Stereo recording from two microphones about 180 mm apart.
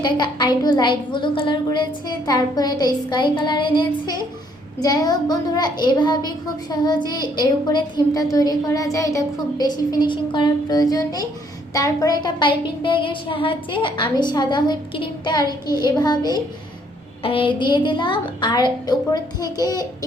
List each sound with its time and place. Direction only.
0.0 s a woman's voice: 25° left (ahead or behind)